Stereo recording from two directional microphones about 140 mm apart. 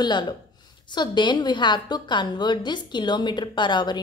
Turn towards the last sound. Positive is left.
turn(degrees=30)  # may be behind; listen again after turning